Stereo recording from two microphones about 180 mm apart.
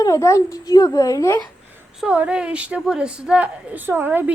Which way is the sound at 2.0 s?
5° right (ahead or behind).